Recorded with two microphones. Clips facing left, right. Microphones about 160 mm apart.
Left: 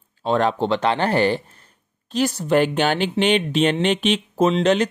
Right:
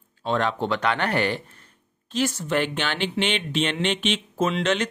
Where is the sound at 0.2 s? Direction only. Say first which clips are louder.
Left 5 dB; 35° left (ahead or behind).